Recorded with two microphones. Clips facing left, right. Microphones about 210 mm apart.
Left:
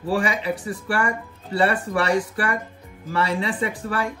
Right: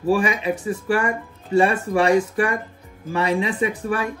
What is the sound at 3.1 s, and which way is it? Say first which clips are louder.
Speech: right 2 dB; 20° right (ahead or behind).